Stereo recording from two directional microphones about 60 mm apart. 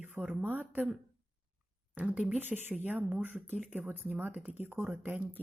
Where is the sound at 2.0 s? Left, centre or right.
Centre.